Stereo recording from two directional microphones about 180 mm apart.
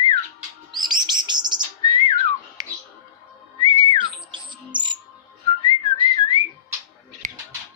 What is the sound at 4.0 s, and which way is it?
Bird, 25° right (ahead or behind).